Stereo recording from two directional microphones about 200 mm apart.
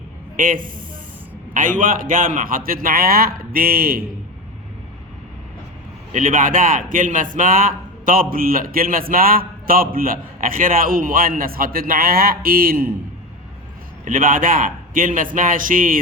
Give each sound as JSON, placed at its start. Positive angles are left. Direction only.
{"t": 0.3, "sound": "a man's voice", "side_deg": -40}
{"t": 6.1, "sound": "a man's voice", "side_deg": -40}
{"t": 14.0, "sound": "a man's voice", "side_deg": -40}